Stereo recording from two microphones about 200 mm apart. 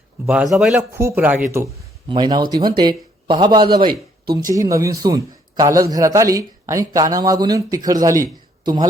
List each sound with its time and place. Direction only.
0.3 s speech: centre (ahead or behind)
0.8 s a man's voice: 15° right (ahead or behind)